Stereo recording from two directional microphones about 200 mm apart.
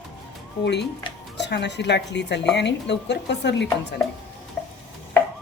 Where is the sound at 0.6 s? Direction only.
60° left (ahead or behind).